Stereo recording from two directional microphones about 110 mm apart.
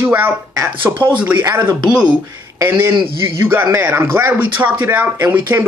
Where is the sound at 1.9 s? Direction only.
5° right (ahead or behind).